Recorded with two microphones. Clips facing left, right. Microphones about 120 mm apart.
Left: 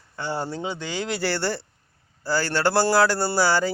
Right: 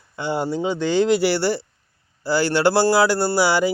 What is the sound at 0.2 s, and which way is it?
Speech, 15° right (ahead or behind).